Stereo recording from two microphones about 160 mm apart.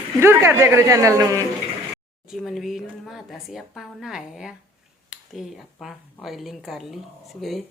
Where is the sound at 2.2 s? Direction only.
Centre (ahead or behind).